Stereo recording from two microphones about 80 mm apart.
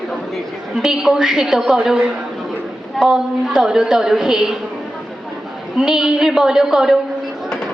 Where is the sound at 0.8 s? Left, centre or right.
Centre.